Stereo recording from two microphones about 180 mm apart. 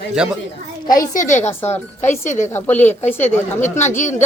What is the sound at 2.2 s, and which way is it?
Speech, 40° left (ahead or behind).